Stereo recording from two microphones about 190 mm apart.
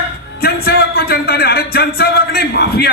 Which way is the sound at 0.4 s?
55° left (ahead or behind).